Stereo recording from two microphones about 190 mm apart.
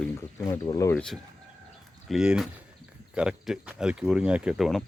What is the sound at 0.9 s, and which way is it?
Speech, 5° left (ahead or behind).